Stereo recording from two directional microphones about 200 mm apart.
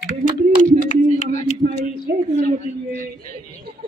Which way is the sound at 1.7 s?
50° right (ahead or behind).